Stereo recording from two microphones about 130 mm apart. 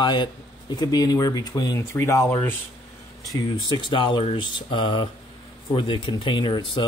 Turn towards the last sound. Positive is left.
turn(degrees=35)  # may be behind; listen again after turning